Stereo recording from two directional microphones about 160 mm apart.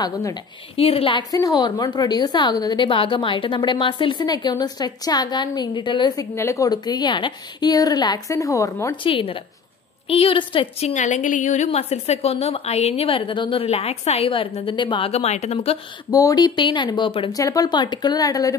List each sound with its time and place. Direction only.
0.0 s a woman's voice: 25° left (ahead or behind)
0.7 s a woman's voice: 40° left (ahead or behind); by 8.9 s 20° left (ahead or behind)
9.0 s a woman's voice: 35° left (ahead or behind)
16.1 s a woman's voice: 20° left (ahead or behind)